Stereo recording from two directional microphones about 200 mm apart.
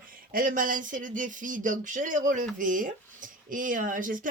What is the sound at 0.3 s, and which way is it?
A woman's voice, 45° right (ahead or behind).